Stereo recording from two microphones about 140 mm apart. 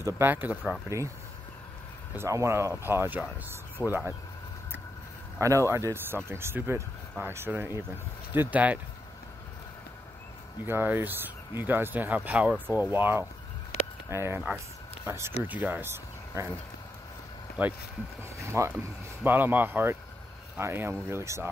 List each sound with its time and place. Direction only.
0.0 s speech: 15° right (ahead or behind)
2.1 s speech: 20° right (ahead or behind)
5.4 s speech: 20° right (ahead or behind)
10.6 s speech: 15° right (ahead or behind)
17.6 s speech: 10° right (ahead or behind)
18.4 s speech: 20° right (ahead or behind)